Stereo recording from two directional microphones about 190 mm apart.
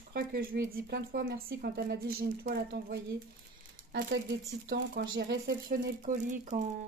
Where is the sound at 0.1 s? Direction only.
50° right (ahead or behind).